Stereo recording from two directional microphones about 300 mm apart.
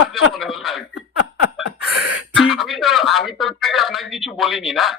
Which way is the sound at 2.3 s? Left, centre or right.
Centre.